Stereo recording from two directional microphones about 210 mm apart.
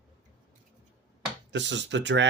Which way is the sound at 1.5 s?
60° right (ahead or behind).